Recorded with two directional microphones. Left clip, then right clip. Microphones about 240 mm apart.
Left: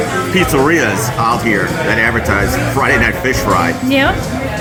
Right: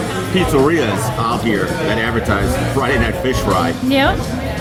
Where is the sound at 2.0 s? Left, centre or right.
Centre.